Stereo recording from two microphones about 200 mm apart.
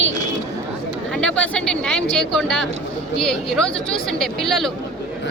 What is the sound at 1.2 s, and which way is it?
Speech, 5° left (ahead or behind).